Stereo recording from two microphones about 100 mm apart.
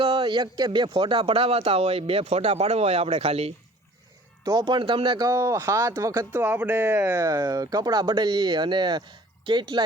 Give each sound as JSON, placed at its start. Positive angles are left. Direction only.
{"t": 0.0, "sound": "speech", "side_deg": -60}
{"t": 4.4, "sound": "speech", "side_deg": -50}
{"t": 5.3, "sound": "speech", "side_deg": -30}
{"t": 6.3, "sound": "speech", "side_deg": -15}